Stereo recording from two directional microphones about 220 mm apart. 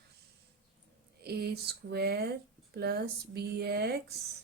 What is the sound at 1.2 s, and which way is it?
Speech, 45° right (ahead or behind).